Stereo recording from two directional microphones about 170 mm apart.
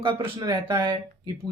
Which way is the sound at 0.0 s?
30° right (ahead or behind).